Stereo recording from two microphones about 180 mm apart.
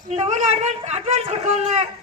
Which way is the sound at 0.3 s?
40° right (ahead or behind).